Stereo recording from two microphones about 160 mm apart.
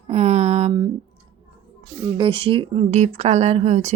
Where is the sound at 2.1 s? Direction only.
35° right (ahead or behind).